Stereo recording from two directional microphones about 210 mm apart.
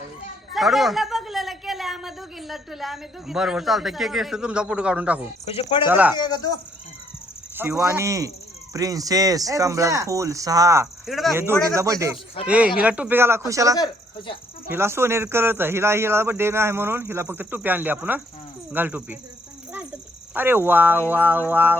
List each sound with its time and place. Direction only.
0.5 s a woman's voice: centre (ahead or behind)
5.5 s speech: 30° left (ahead or behind)
5.8 s a man's voice: 10° right (ahead or behind)
6.1 s speech: 20° left (ahead or behind)
7.5 s a man's voice: 10° right (ahead or behind)
11.0 s speech: centre (ahead or behind)
11.7 s a man's voice: 15° right (ahead or behind)
13.7 s speech: 20° left (ahead or behind)
14.7 s a man's voice: 10° right (ahead or behind)